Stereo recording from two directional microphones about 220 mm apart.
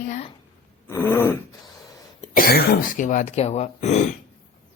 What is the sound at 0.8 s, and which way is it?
Throat clearing, 10° left (ahead or behind).